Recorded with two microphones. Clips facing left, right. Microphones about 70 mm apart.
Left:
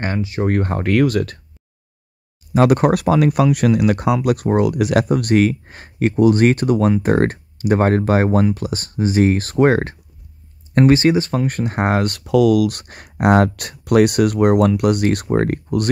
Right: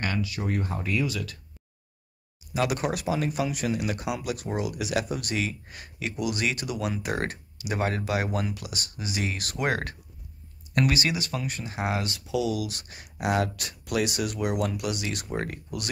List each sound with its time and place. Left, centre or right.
0.0 s speech: left
0.4 s speech: left
2.5 s speech: left